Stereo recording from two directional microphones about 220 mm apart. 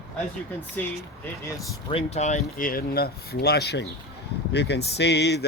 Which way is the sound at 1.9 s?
25° left (ahead or behind).